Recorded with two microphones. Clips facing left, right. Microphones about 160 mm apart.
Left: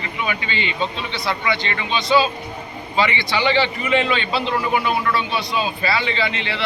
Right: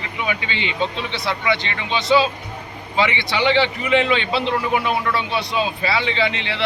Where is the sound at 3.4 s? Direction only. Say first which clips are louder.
Right 1 dB; 15° right (ahead or behind).